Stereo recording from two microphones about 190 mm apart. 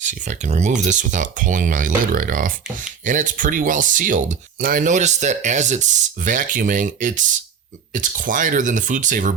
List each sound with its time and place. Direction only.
0.0 s speech: 40° right (ahead or behind)